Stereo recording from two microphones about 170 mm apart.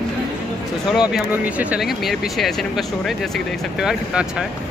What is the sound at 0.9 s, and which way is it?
Speech, 5° right (ahead or behind).